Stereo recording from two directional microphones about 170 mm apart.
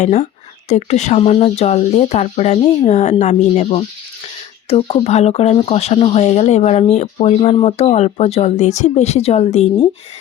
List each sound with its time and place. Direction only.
0.0 s speech: 45° left (ahead or behind)